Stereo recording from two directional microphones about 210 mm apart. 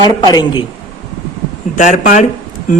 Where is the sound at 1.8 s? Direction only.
35° left (ahead or behind).